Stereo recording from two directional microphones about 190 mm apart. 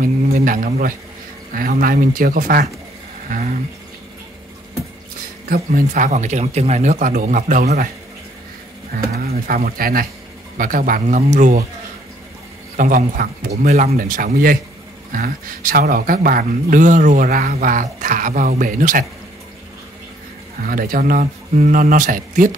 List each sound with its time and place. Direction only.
0.0 s a man's voice: 45° right (ahead or behind)
3.3 s a sound: 40° right (ahead or behind)
5.5 s speech: 45° right (ahead or behind)
8.9 s speech: 55° right (ahead or behind)
12.7 s speech: 45° right (ahead or behind)
20.5 s speech: 50° right (ahead or behind)